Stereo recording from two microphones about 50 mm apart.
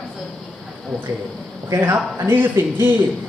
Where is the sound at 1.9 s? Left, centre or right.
Right.